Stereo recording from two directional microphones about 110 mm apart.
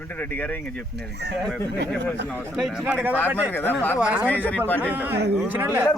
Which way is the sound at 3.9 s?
10° right (ahead or behind).